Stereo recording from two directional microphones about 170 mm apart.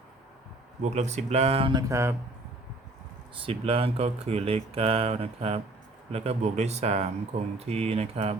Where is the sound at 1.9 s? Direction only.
15° right (ahead or behind).